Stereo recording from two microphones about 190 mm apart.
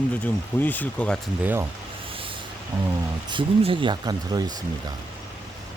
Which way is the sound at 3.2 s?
25° right (ahead or behind).